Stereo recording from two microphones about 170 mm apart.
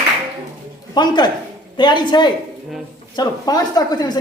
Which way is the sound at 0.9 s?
25° left (ahead or behind).